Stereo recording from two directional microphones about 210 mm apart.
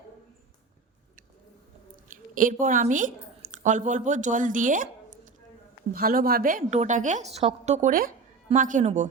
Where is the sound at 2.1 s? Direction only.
40° right (ahead or behind).